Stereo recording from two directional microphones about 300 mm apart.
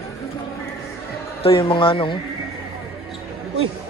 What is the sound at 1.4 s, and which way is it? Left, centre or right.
Speech, centre.